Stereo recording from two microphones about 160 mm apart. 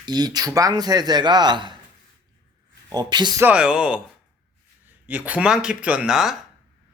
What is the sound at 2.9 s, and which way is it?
Speech, 25° right (ahead or behind).